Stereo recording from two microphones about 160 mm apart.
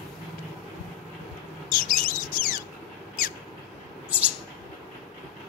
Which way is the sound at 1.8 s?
55° left (ahead or behind).